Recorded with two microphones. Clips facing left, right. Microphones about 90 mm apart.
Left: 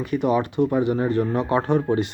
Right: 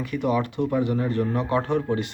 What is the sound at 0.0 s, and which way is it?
Speech, 25° left (ahead or behind).